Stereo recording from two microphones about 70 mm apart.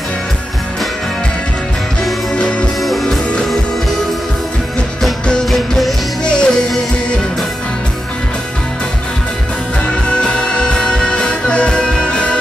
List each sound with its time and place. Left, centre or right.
2.3 s music: centre
2.8 s music: centre
5.3 s music: centre
6.2 s music: centre
10.0 s music: centre